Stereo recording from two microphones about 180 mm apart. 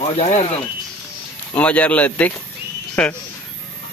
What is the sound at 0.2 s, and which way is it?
Speech, 35° left (ahead or behind).